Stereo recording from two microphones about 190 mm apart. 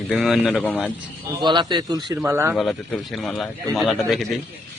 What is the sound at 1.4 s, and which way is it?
A man's voice, 25° right (ahead or behind).